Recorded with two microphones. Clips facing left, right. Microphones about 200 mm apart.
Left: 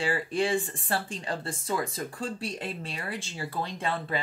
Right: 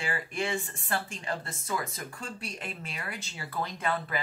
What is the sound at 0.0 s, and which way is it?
Speech, 30° left (ahead or behind).